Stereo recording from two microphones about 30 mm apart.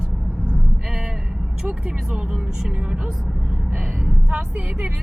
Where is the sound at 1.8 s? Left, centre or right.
Right.